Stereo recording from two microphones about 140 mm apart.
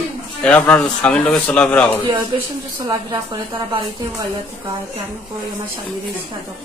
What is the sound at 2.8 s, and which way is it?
Speech, 30° right (ahead or behind).